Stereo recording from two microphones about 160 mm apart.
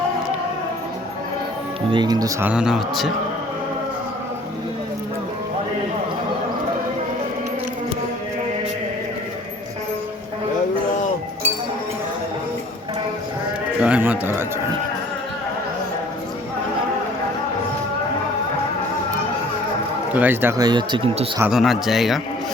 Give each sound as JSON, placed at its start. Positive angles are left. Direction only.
{"t": 1.9, "sound": "speech", "side_deg": -25}
{"t": 2.4, "sound": "speech", "side_deg": -5}
{"t": 13.8, "sound": "a sound", "side_deg": -10}
{"t": 20.1, "sound": "speech", "side_deg": -10}
{"t": 20.6, "sound": "speech", "side_deg": -25}
{"t": 21.5, "sound": "speech", "side_deg": 0}